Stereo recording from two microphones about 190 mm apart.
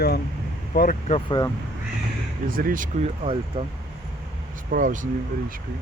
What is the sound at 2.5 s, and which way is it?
Speech, 50° right (ahead or behind).